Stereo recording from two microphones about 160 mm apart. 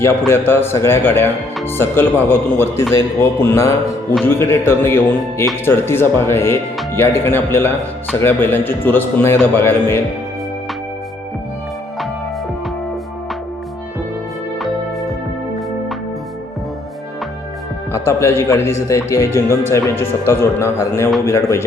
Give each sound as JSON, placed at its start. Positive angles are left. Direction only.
{"t": 0.0, "sound": "speech", "side_deg": 15}
{"t": 17.9, "sound": "speech", "side_deg": 15}